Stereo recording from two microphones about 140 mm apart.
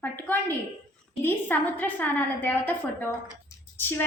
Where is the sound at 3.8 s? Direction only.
15° left (ahead or behind).